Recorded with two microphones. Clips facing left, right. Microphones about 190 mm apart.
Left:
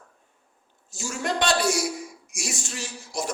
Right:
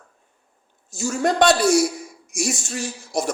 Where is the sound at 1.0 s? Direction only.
40° right (ahead or behind).